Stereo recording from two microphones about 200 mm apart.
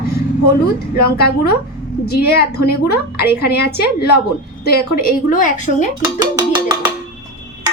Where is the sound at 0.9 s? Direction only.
50° left (ahead or behind).